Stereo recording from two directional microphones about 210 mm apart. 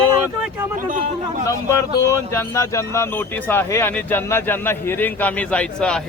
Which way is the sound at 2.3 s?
10° left (ahead or behind).